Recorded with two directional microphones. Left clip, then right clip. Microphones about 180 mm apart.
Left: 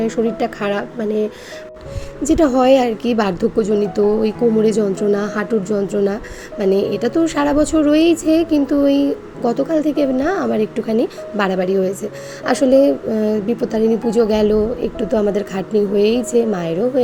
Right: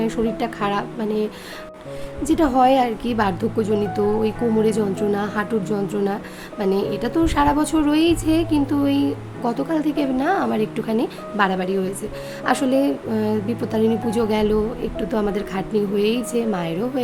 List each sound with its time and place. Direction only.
0.0 s a woman's voice: 5° left (ahead or behind)
2.2 s a woman's voice: 15° left (ahead or behind)